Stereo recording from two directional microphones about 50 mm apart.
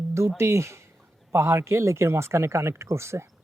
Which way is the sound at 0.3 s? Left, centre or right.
Right.